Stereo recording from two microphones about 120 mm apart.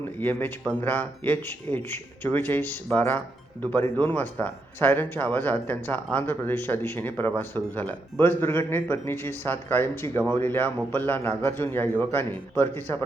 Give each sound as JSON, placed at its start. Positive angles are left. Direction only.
{"t": 0.2, "sound": "a man's voice", "side_deg": 15}